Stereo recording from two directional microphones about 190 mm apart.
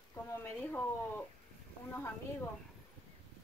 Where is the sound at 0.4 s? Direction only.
10° left (ahead or behind).